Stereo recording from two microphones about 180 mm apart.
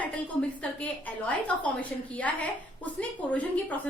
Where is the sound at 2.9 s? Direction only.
10° left (ahead or behind).